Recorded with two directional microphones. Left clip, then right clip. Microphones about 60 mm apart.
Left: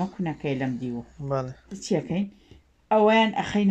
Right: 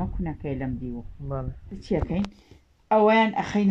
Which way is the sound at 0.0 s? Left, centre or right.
Left.